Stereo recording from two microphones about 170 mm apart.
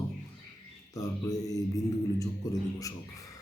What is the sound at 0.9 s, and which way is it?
Speech, 20° left (ahead or behind).